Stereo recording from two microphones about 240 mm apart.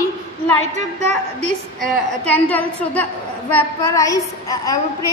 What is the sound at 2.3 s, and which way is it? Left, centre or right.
A woman's voice, centre.